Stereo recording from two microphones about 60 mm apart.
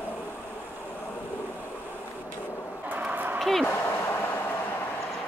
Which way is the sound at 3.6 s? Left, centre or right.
Left.